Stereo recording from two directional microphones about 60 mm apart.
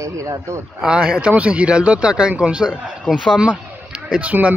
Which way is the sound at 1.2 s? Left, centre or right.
Right.